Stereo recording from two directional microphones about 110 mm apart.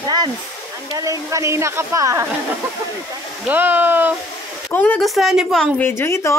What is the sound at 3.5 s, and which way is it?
Speech, 15° right (ahead or behind).